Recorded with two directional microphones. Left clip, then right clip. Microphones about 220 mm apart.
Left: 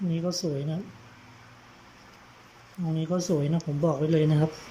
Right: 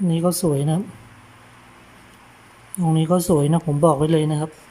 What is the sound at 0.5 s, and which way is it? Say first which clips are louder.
Speech: right 10 dB; 20° right (ahead or behind).